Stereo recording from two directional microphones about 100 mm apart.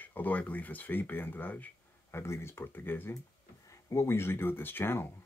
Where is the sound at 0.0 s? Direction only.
20° left (ahead or behind).